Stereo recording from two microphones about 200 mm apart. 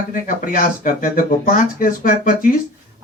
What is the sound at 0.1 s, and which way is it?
Speech, 40° left (ahead or behind).